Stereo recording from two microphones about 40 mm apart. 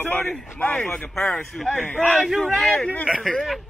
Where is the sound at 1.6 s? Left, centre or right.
Left.